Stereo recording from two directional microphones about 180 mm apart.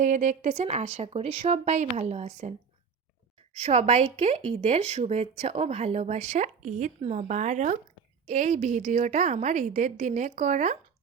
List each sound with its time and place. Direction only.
0.0 s a woman's voice: 40° right (ahead or behind)